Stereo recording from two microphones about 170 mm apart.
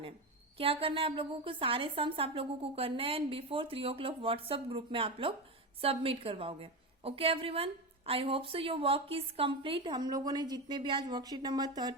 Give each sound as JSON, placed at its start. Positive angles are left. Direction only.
{"t": 0.5, "sound": "a woman's voice", "side_deg": -35}